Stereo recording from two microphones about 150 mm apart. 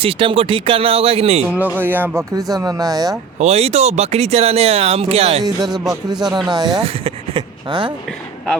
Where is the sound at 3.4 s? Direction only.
45° right (ahead or behind).